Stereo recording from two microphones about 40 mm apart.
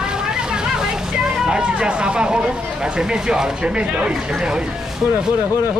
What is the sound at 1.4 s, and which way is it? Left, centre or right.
Speech, right.